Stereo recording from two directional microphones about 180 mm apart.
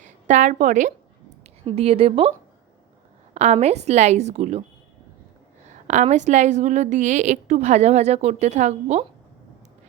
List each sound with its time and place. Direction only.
0.0 s a woman's voice: 45° right (ahead or behind)
3.3 s a woman's voice: 35° right (ahead or behind)
5.9 s a woman's voice: 40° right (ahead or behind)